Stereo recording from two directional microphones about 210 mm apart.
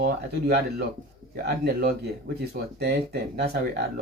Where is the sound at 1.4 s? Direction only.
50° right (ahead or behind).